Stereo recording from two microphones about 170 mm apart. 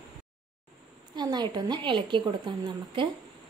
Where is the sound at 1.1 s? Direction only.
25° right (ahead or behind).